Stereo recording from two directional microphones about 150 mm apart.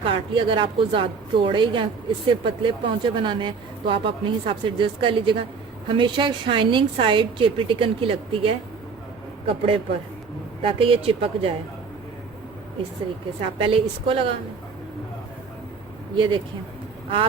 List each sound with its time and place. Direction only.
0.0 s speech: 35° right (ahead or behind)
13.6 s speech: 35° right (ahead or behind)
16.1 s speech: 30° right (ahead or behind)